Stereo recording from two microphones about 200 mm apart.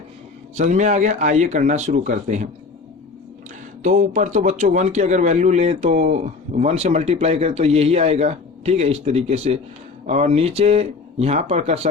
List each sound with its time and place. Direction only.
0.5 s speech: 40° right (ahead or behind)
3.8 s speech: 40° right (ahead or behind)